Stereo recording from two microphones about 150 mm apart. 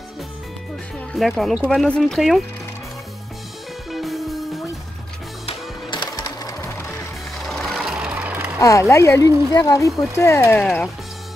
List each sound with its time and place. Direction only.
0.9 s speech: 5° left (ahead or behind)
3.9 s music: centre (ahead or behind)
5.5 s music: 30° left (ahead or behind)
7.4 s vehicle: centre (ahead or behind)
8.5 s speech: 20° left (ahead or behind)